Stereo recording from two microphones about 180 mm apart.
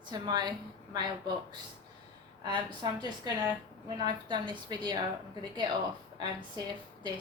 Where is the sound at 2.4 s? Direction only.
25° right (ahead or behind).